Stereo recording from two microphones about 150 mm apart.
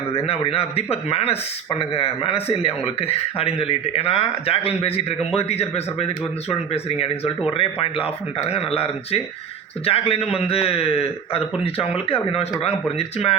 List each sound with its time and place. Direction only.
0.1 s a man's voice: 40° left (ahead or behind)